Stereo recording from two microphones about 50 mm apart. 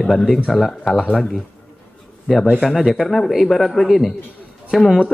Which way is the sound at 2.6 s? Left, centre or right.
Centre.